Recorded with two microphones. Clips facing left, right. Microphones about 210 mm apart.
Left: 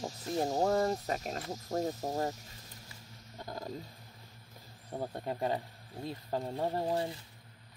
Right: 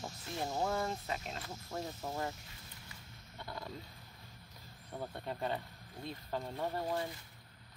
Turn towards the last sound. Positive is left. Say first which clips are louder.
# left 5 dB
turn(degrees=30)  # may be behind; listen again after turning